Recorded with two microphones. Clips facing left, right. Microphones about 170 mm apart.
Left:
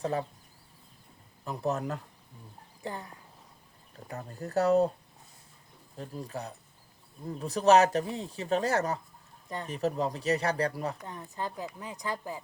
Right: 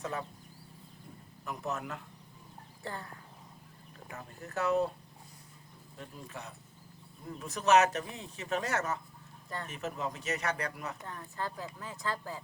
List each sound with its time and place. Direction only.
0.0 s speech: 35° left (ahead or behind)
1.5 s speech: 35° left (ahead or behind)
2.8 s speech: 15° left (ahead or behind)
4.1 s speech: 35° left (ahead or behind)
6.0 s speech: 35° left (ahead or behind)
11.0 s speech: 20° left (ahead or behind)